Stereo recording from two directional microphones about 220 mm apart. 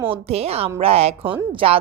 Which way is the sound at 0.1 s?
30° right (ahead or behind).